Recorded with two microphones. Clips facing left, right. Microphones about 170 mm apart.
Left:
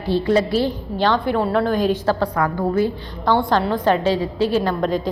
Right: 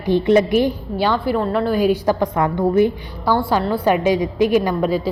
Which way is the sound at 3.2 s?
5° right (ahead or behind).